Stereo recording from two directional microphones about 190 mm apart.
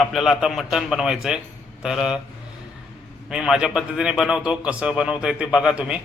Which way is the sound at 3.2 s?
Centre (ahead or behind).